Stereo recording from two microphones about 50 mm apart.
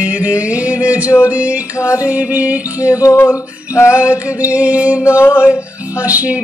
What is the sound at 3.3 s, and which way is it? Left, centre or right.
Male singing, left.